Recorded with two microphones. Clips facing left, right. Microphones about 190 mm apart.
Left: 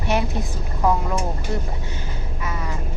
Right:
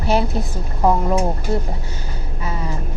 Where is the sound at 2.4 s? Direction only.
30° right (ahead or behind).